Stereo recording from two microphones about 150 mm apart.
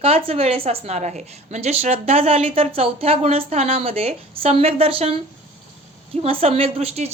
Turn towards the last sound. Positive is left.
turn(degrees=-45)  # may be behind; listen again after turning